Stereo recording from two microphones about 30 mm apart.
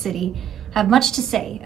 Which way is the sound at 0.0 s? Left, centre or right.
Centre.